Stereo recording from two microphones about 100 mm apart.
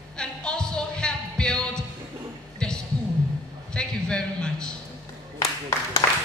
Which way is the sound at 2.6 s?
10° left (ahead or behind).